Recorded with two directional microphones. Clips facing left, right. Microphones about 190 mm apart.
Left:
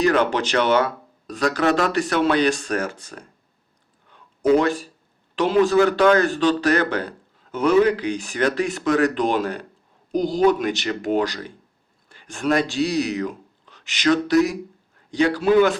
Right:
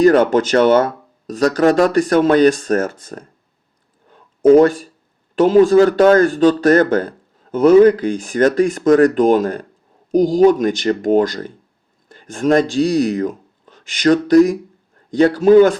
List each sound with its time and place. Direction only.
0.0 s speech: 45° right (ahead or behind)
4.1 s a sound: 45° right (ahead or behind)
5.6 s speech: 40° right (ahead or behind)